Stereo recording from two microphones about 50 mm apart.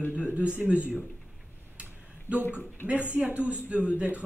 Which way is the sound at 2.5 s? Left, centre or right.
Right.